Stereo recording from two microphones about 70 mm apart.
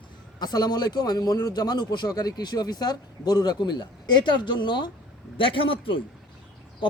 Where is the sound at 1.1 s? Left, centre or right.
Left.